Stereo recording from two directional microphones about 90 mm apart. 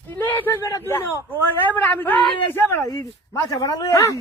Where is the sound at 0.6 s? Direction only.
30° left (ahead or behind).